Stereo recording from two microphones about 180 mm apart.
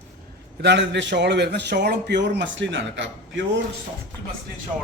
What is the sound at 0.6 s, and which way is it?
A man's voice, 70° right (ahead or behind).